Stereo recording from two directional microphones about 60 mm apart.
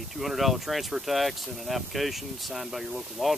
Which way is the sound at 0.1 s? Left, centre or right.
Centre.